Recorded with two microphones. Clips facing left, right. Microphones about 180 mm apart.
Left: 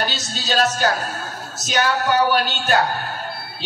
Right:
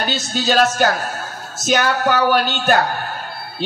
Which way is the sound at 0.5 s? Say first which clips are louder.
Right 3 dB; 50° right (ahead or behind).